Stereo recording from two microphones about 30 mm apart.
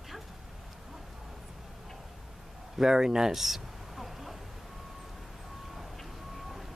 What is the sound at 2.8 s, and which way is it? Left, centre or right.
Speech, right.